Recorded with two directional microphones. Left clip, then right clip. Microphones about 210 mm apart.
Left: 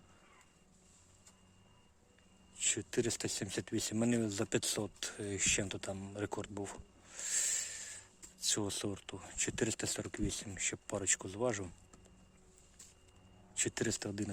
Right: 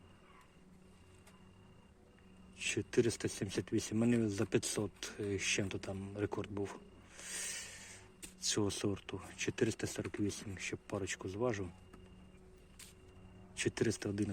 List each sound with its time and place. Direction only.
2.6 s speech: 10° left (ahead or behind)
13.6 s speech: 10° left (ahead or behind)